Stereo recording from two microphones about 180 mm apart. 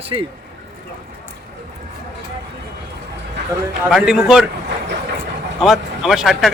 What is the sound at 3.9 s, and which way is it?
Speech, centre (ahead or behind).